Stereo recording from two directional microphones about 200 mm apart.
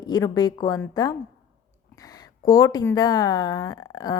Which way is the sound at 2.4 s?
20° left (ahead or behind).